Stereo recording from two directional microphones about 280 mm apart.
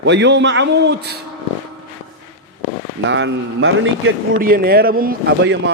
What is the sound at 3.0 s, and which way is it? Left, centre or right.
A man's voice, right.